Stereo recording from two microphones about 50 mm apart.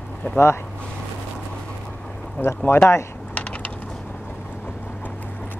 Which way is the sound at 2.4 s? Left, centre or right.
Left.